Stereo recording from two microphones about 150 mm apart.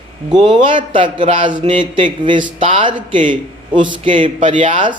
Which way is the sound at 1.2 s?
35° right (ahead or behind).